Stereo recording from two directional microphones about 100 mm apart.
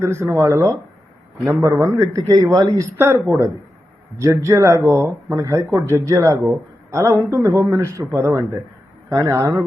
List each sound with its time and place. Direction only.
0.0 s a man's voice: 25° right (ahead or behind)
2.1 s speech: 35° right (ahead or behind)
2.7 s a man's voice: 30° right (ahead or behind)